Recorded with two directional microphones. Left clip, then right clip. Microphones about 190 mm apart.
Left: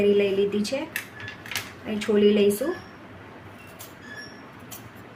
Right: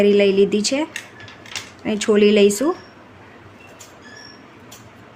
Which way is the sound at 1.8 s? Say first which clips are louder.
Right 6 dB; 55° right (ahead or behind).